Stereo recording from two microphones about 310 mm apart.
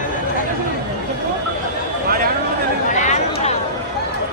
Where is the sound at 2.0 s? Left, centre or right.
Right.